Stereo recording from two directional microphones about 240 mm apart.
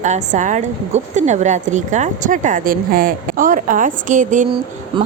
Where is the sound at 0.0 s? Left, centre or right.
Right.